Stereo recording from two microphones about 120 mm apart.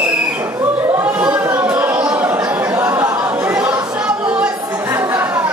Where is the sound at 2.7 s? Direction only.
25° right (ahead or behind).